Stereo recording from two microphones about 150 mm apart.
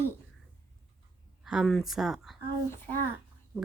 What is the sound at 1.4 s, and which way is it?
Speech, centre (ahead or behind).